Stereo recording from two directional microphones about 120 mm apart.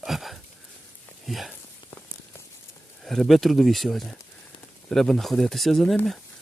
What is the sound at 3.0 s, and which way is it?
Speech, centre (ahead or behind).